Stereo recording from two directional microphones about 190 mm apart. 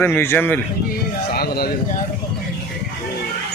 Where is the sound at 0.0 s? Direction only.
10° left (ahead or behind).